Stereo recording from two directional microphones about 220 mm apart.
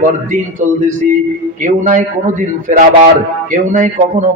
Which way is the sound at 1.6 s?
35° right (ahead or behind).